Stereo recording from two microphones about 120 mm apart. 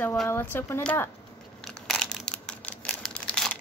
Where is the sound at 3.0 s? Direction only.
5° left (ahead or behind).